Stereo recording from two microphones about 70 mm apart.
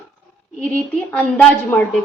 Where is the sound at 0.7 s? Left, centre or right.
Left.